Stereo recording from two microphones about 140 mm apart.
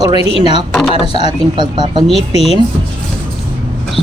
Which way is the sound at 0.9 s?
40° left (ahead or behind).